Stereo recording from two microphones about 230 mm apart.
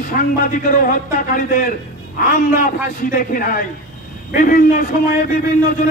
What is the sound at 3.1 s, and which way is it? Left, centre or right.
A man's voice, left.